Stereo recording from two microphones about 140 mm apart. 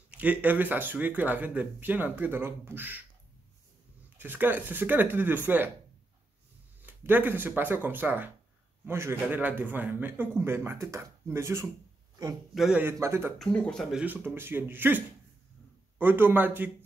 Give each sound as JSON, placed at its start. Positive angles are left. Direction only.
{"t": 0.1, "sound": "speech", "side_deg": -10}
{"t": 4.2, "sound": "speech", "side_deg": -15}
{"t": 6.8, "sound": "speech", "side_deg": -15}
{"t": 12.5, "sound": "speech", "side_deg": -5}
{"t": 12.8, "sound": "speech", "side_deg": -20}
{"t": 13.4, "sound": "speech", "side_deg": 5}
{"t": 13.9, "sound": "speech", "side_deg": -10}